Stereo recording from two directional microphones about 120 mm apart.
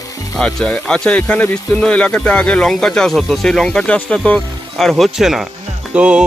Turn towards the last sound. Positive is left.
turn(degrees=-10)  # may be behind; listen again after turning